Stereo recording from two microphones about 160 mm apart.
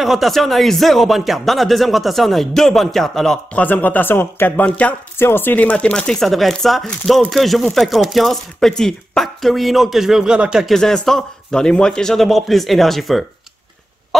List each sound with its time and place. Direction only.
0.0 s speech: centre (ahead or behind)